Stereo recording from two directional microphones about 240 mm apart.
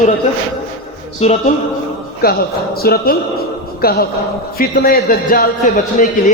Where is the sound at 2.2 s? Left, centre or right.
Left.